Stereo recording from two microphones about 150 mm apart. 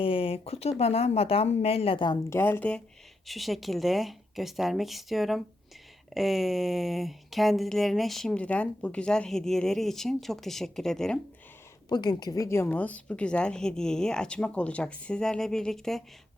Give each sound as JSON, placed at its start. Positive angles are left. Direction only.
{"t": 0.0, "sound": "speech", "side_deg": 35}
{"t": 2.3, "sound": "a woman's voice", "side_deg": 15}
{"t": 11.9, "sound": "a woman's voice", "side_deg": 30}